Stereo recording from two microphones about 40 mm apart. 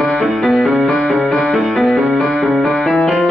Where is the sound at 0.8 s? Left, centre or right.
Left.